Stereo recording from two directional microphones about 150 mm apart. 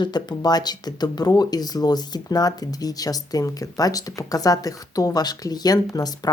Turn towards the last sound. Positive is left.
turn(degrees=25)  # may be behind; listen again after turning